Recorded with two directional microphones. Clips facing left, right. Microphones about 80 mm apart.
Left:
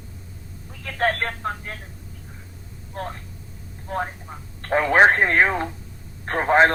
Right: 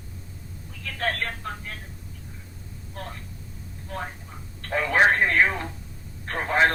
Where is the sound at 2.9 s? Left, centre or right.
Left.